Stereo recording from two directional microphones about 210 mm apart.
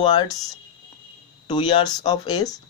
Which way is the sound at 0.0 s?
20° left (ahead or behind).